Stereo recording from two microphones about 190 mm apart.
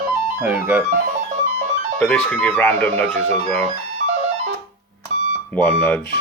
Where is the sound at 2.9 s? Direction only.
30° right (ahead or behind).